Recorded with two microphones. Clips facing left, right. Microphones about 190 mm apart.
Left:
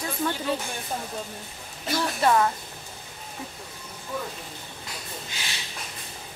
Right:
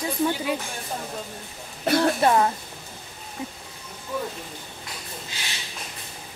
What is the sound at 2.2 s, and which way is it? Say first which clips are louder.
Speech: left 2 dB; 25° right (ahead or behind).